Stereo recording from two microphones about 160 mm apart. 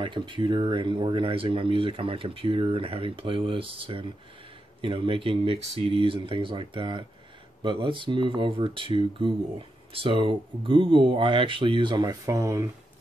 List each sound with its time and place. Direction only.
0.0 s speech: 30° right (ahead or behind)